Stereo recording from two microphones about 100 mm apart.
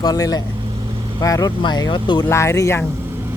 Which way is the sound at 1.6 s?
45° left (ahead or behind).